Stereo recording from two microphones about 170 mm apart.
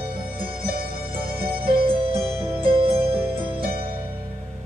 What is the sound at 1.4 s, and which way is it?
Music, 60° right (ahead or behind).